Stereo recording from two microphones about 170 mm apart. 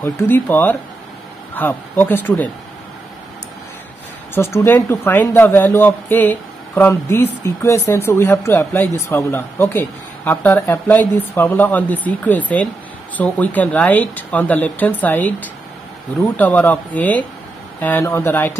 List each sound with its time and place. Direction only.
0.0 s speech: 15° left (ahead or behind)
4.3 s speech: 15° left (ahead or behind)